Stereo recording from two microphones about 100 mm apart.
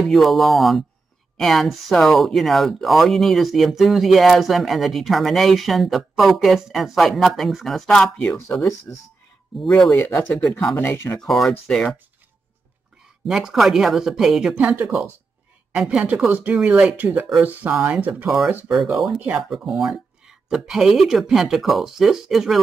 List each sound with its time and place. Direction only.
0.0 s speech: centre (ahead or behind)
8.9 s speech: 25° left (ahead or behind)
9.6 s speech: centre (ahead or behind)
9.9 s speech: 25° left (ahead or behind)
10.4 s speech: 5° left (ahead or behind)
10.8 s speech: 25° left (ahead or behind)
11.2 s speech: centre (ahead or behind)
13.3 s speech: 5° right (ahead or behind)
18.7 s speech: 5° right (ahead or behind)